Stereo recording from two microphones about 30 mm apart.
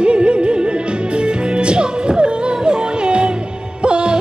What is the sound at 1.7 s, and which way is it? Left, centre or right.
Music, right.